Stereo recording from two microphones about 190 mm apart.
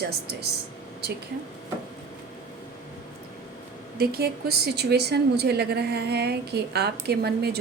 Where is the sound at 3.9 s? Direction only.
55° right (ahead or behind).